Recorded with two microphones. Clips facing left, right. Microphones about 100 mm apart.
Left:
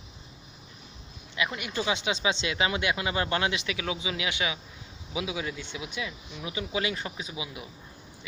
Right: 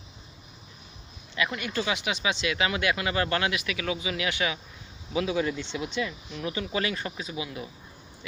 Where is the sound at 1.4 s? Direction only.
15° left (ahead or behind).